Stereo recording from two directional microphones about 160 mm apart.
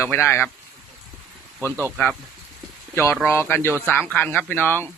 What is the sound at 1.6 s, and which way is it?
Speech, 15° left (ahead or behind).